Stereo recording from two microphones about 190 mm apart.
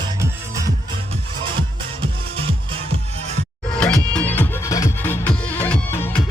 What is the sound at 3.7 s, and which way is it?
Music, 5° left (ahead or behind).